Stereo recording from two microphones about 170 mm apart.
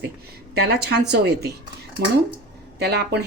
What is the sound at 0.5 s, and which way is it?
A woman's voice, 70° right (ahead or behind).